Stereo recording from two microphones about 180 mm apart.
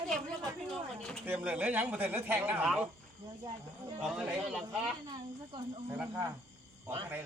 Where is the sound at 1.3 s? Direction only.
10° right (ahead or behind).